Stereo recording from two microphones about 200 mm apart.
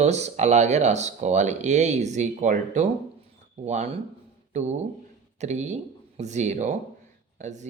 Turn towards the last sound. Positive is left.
turn(degrees=-35)  # may be behind; listen again after turning